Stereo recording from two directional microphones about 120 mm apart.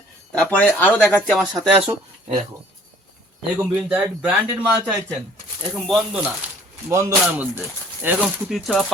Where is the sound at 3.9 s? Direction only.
10° right (ahead or behind).